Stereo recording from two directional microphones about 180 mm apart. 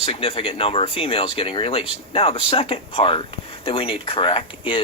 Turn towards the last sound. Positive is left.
turn(degrees=30)  # may be behind; listen again after turning